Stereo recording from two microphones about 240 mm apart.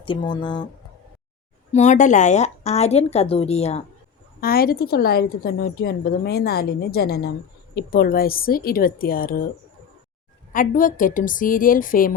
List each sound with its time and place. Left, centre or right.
0.0 s a woman's voice: centre
1.7 s a woman's voice: left
4.4 s a woman's voice: left
10.5 s a woman's voice: left